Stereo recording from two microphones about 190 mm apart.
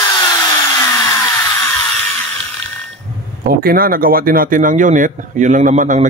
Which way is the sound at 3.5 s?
50° right (ahead or behind).